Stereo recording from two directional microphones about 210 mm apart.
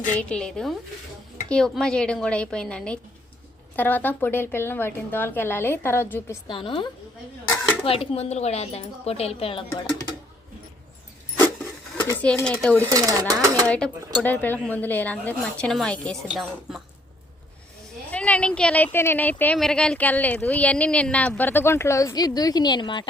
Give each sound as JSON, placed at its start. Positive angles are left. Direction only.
{"t": 0.1, "sound": "speech", "side_deg": 5}
{"t": 6.5, "sound": "a woman's voice", "side_deg": 25}
{"t": 11.9, "sound": "speech", "side_deg": 5}
{"t": 12.9, "sound": "speech", "side_deg": -15}
{"t": 13.7, "sound": "speech", "side_deg": 5}
{"t": 18.1, "sound": "speech", "side_deg": 5}